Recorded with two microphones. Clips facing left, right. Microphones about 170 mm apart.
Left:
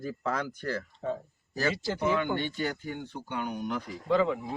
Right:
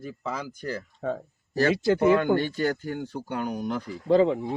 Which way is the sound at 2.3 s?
40° right (ahead or behind).